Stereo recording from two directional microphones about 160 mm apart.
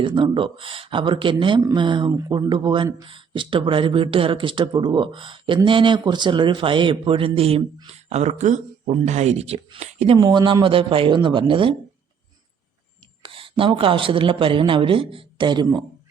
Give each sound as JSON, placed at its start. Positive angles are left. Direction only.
{"t": 0.0, "sound": "speech", "side_deg": -30}
{"t": 10.2, "sound": "speech", "side_deg": -25}
{"t": 13.2, "sound": "speech", "side_deg": -35}